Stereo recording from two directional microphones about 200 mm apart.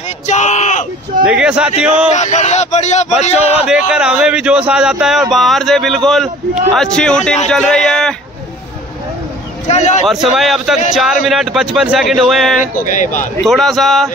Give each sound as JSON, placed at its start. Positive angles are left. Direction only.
{"t": 0.3, "sound": "speech", "side_deg": 35}
{"t": 1.2, "sound": "speech", "side_deg": -5}
{"t": 2.1, "sound": "speech", "side_deg": 35}
{"t": 3.6, "sound": "speech", "side_deg": -5}
{"t": 9.7, "sound": "speech", "side_deg": 35}
{"t": 10.0, "sound": "speech", "side_deg": 0}
{"t": 12.7, "sound": "speech", "side_deg": 40}
{"t": 13.4, "sound": "speech", "side_deg": 0}